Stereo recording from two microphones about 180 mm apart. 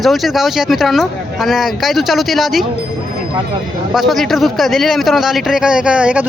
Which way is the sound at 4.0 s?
Centre (ahead or behind).